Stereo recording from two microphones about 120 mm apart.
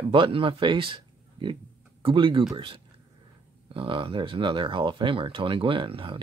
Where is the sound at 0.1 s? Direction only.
45° right (ahead or behind).